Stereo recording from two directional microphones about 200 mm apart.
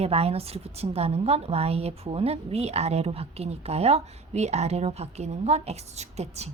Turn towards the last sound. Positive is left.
turn(degrees=-35)  # may be behind; listen again after turning